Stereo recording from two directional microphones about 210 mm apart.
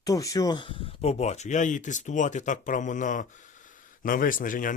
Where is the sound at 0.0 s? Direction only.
15° left (ahead or behind).